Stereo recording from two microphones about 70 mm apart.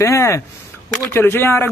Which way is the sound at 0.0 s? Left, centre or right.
Left.